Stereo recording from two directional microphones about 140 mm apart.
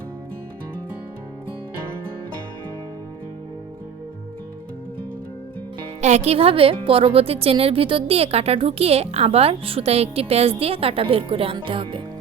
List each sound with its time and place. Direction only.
6.0 s a woman's voice: 55° right (ahead or behind); by 12.0 s 40° right (ahead or behind)